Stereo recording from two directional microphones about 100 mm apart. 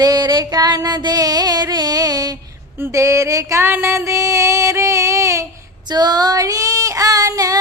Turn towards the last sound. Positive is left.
turn(degrees=-35)  # may be behind; listen again after turning